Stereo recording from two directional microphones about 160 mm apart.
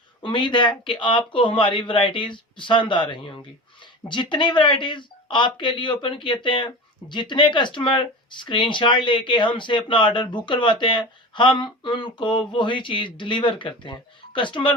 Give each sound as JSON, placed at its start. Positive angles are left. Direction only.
{"t": 0.2, "sound": "speech", "side_deg": 30}